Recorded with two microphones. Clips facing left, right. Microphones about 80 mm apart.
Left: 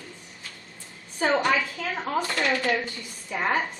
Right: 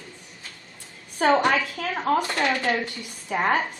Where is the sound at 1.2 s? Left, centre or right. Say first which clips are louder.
Right 3 dB; right.